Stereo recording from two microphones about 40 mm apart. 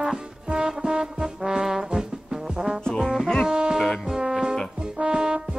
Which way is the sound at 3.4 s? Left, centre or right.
Centre.